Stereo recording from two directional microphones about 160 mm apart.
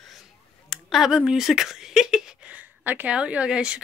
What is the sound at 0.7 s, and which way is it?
Speech, centre (ahead or behind).